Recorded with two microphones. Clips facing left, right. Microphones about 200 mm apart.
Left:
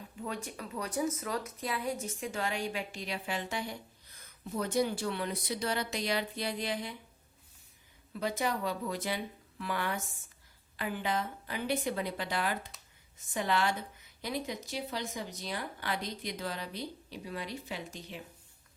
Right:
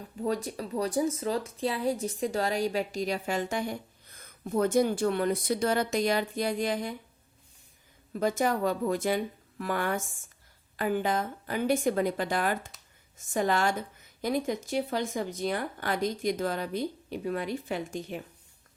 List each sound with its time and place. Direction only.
0.2 s speech: 35° right (ahead or behind)
8.1 s speech: 45° right (ahead or behind)